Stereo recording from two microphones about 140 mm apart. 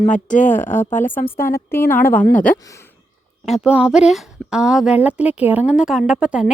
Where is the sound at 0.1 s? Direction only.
65° left (ahead or behind).